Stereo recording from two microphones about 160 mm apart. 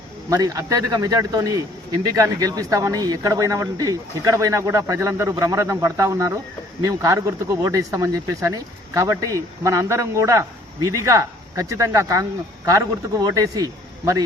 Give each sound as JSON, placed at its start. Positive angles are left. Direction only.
{"t": 0.3, "sound": "speech", "side_deg": -20}